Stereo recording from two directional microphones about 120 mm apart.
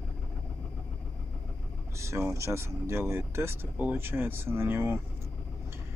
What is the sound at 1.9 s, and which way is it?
Speech, 20° right (ahead or behind).